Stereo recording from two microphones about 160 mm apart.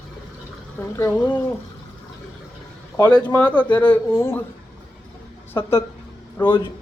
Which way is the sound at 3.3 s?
15° left (ahead or behind).